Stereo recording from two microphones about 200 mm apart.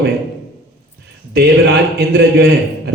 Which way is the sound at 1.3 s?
55° right (ahead or behind).